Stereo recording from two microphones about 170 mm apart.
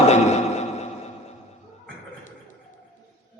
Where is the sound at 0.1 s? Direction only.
40° left (ahead or behind).